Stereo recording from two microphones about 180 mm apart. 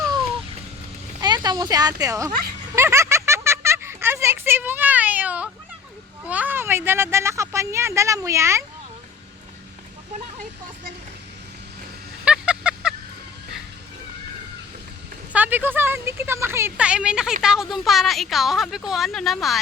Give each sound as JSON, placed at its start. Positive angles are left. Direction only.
{"t": 1.2, "sound": "speech", "side_deg": -25}
{"t": 2.7, "sound": "a sound", "side_deg": -15}
{"t": 6.2, "sound": "speech", "side_deg": -10}
{"t": 12.2, "sound": "vehicle", "side_deg": -5}
{"t": 15.3, "sound": "a woman's voice", "side_deg": -10}